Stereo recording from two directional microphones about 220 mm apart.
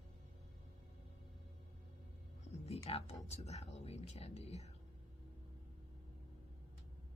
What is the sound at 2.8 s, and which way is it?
Speech, 30° left (ahead or behind).